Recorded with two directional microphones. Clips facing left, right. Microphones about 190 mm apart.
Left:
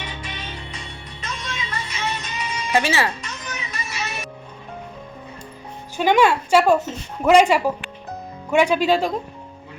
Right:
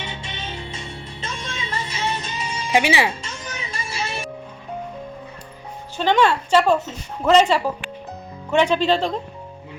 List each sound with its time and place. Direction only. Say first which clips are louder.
0.0 s music: right 1 dB; 25° right (ahead or behind)
2.7 s speech: right 2 dB; 15° right (ahead or behind)
3.2 s music: even; 30° right (ahead or behind)
6.0 s speech: left 1 dB; 10° left (ahead or behind)